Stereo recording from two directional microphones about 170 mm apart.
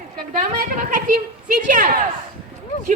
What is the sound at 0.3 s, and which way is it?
A woman's voice, 50° right (ahead or behind).